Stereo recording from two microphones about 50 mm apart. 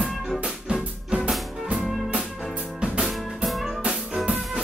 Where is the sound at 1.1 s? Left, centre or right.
Right.